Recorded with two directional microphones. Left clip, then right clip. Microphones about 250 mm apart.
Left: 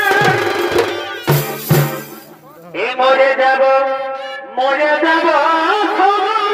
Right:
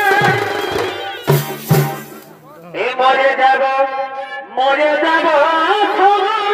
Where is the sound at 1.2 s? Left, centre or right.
Left.